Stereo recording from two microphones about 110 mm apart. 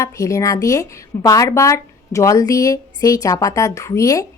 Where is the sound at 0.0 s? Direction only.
30° left (ahead or behind).